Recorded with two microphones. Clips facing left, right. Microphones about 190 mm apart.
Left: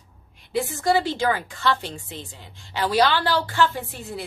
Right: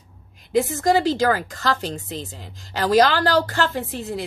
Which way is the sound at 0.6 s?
40° right (ahead or behind).